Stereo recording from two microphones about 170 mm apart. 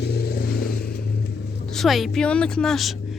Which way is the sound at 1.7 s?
Centre (ahead or behind).